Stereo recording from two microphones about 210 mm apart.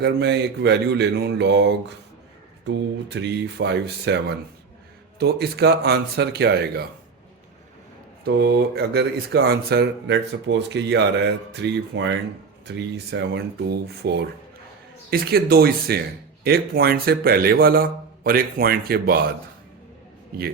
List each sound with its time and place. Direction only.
0.0 s speech: 55° right (ahead or behind)
2.6 s speech: 55° right (ahead or behind)
8.2 s speech: 50° right (ahead or behind)